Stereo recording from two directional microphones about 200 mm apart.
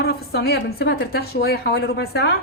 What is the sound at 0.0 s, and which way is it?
A woman's voice, 50° left (ahead or behind).